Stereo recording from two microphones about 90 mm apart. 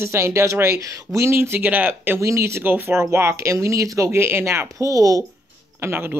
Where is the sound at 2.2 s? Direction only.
30° right (ahead or behind).